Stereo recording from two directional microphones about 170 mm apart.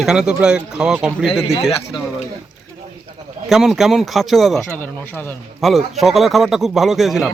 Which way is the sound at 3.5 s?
Centre (ahead or behind).